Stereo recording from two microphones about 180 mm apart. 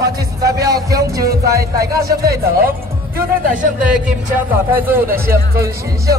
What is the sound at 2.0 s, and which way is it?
Speech, 60° right (ahead or behind).